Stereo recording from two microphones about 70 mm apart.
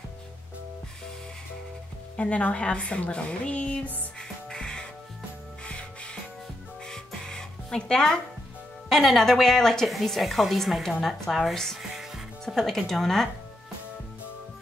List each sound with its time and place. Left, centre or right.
2.1 s a woman's voice: centre
4.2 s music: centre
8.8 s a woman's voice: centre